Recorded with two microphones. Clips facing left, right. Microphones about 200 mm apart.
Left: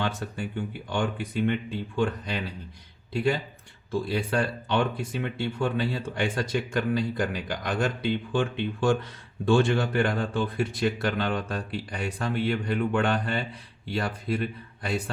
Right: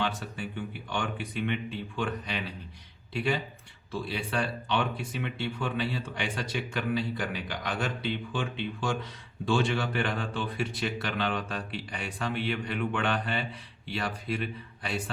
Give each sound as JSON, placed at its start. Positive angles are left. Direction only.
{"t": 0.0, "sound": "a man's voice", "side_deg": 45}